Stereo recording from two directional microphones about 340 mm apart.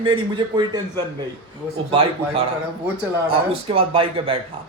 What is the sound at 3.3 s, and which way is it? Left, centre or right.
Speech, centre.